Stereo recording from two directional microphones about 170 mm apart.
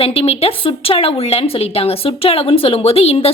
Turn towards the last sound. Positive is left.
turn(degrees=35)  # may be behind; listen again after turning